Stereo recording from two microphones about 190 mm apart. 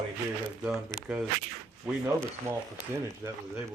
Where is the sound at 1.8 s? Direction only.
15° right (ahead or behind).